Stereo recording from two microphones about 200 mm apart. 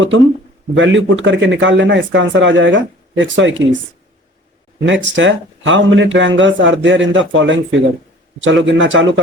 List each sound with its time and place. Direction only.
0.7 s a man's voice: 65° right (ahead or behind)
4.9 s a man's voice: 70° right (ahead or behind)